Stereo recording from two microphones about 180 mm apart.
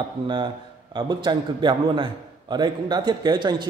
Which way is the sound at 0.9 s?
25° right (ahead or behind).